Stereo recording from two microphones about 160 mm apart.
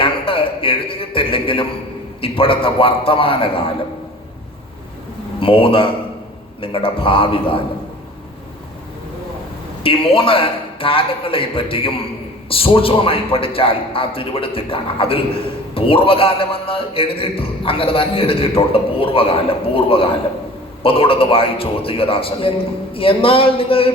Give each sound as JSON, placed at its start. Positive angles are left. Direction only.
{"t": 0.0, "sound": "a man's voice", "side_deg": 35}
{"t": 5.4, "sound": "a man's voice", "side_deg": 35}
{"t": 9.8, "sound": "a man's voice", "side_deg": 35}